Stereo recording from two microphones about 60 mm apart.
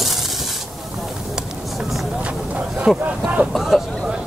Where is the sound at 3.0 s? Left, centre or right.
Centre.